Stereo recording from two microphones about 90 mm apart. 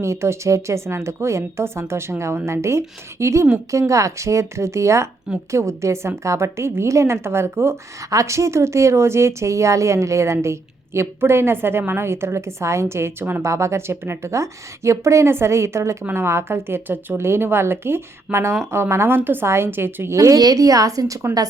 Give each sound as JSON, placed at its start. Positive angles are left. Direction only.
{"t": 0.0, "sound": "a woman's voice", "side_deg": -30}